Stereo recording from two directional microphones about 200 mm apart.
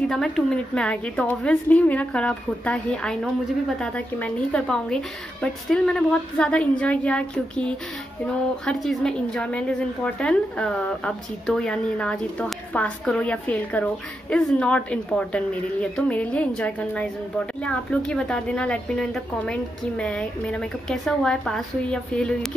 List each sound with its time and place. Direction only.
0.1 s a woman's voice: 5° left (ahead or behind)